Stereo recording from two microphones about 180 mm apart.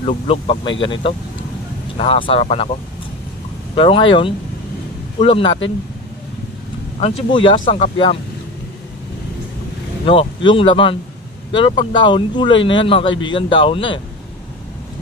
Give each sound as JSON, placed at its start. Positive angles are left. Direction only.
{"t": 0.0, "sound": "speech", "side_deg": 35}
{"t": 2.0, "sound": "speech", "side_deg": 30}
{"t": 3.7, "sound": "speech", "side_deg": 30}
{"t": 7.0, "sound": "speech", "side_deg": 30}
{"t": 10.0, "sound": "speech", "side_deg": 30}